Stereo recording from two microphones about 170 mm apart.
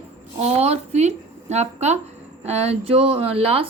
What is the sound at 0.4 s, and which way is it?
A woman's voice, 40° right (ahead or behind).